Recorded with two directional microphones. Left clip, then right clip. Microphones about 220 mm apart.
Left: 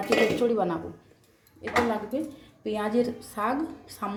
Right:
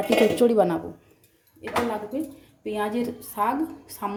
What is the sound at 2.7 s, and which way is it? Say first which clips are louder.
Speech: left 1 dB; 15° right (ahead or behind).